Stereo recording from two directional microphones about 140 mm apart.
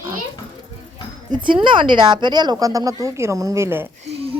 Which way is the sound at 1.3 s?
35° right (ahead or behind).